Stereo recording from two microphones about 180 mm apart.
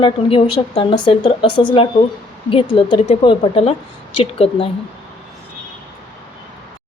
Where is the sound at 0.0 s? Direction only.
30° left (ahead or behind).